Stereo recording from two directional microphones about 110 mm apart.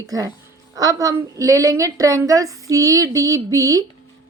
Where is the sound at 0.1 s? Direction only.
35° right (ahead or behind).